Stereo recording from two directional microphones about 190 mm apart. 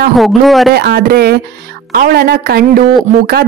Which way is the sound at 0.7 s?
55° right (ahead or behind).